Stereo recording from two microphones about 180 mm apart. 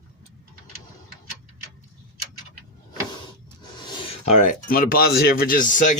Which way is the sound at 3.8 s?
25° left (ahead or behind).